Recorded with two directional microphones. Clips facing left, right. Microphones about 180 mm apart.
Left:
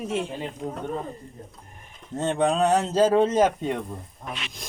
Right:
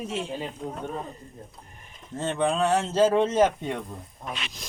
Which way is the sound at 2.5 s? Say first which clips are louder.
Even; 20° left (ahead or behind).